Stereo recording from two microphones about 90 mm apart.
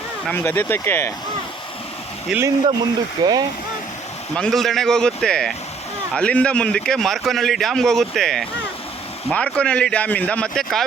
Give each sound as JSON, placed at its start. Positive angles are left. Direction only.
{"t": 0.3, "sound": "speech", "side_deg": 25}
{"t": 2.3, "sound": "speech", "side_deg": -5}
{"t": 3.2, "sound": "speech", "side_deg": -50}
{"t": 4.4, "sound": "speech", "side_deg": 5}